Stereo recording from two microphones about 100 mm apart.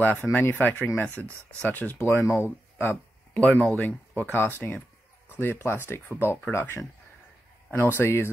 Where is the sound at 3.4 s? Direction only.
10° left (ahead or behind).